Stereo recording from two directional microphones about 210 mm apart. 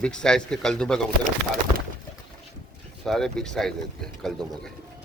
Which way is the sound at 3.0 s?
Centre (ahead or behind).